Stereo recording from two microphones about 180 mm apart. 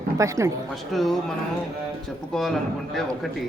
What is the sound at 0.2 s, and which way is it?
Speech, 15° right (ahead or behind).